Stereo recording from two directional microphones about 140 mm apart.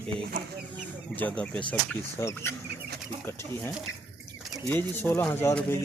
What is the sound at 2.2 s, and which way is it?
Speech, 20° left (ahead or behind).